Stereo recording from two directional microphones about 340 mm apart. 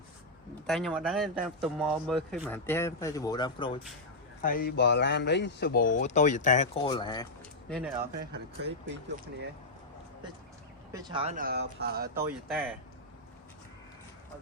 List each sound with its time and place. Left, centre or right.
0.7 s speech: centre
4.4 s speech: left
7.7 s speech: centre
7.9 s speech: right
10.9 s speech: centre